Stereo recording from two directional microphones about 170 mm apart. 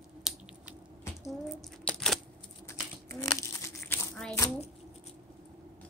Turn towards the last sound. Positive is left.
turn(degrees=15)  # may be behind; listen again after turning